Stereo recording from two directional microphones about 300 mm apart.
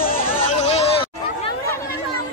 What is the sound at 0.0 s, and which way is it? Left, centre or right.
Chatter, left.